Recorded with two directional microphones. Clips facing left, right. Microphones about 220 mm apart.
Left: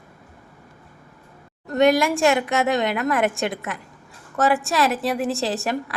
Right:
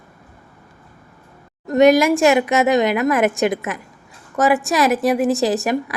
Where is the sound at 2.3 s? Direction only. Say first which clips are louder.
Right 5 dB; 20° right (ahead or behind).